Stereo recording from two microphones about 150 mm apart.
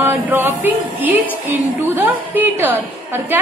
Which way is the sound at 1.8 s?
15° right (ahead or behind).